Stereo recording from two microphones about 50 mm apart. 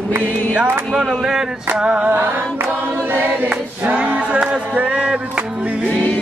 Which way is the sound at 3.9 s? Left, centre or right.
Right.